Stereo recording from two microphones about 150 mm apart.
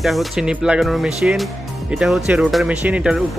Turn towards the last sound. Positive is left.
turn(degrees=-5)  # may be behind; listen again after turning